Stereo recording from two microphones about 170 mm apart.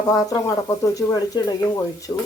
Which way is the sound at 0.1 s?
20° left (ahead or behind).